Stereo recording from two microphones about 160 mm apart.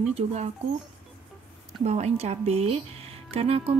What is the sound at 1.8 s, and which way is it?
Speech, 40° right (ahead or behind).